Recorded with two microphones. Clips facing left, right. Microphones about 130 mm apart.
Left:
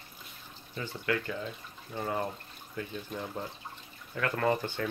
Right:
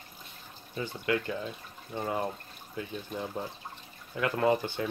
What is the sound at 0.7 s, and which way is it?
Speech, 20° right (ahead or behind).